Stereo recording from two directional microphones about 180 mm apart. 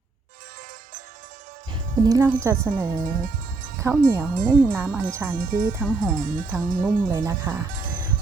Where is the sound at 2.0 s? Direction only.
15° right (ahead or behind).